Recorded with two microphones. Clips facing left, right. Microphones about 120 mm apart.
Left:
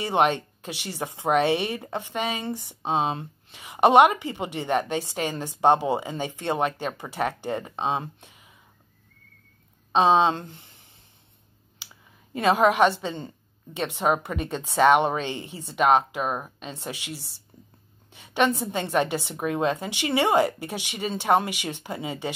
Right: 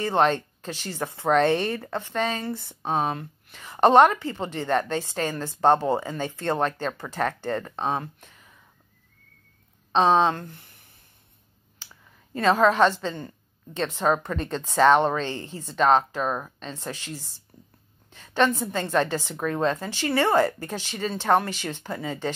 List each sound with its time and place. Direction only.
0.0 s speech: 15° left (ahead or behind)
9.9 s speech: 20° left (ahead or behind)
11.8 s speech: 15° left (ahead or behind)